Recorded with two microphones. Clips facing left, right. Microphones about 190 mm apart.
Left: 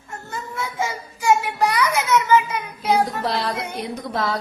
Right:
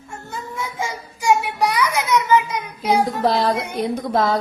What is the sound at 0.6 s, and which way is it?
Child singing, 15° right (ahead or behind).